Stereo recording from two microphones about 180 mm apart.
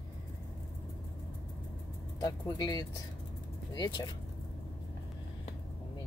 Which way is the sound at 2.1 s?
20° left (ahead or behind).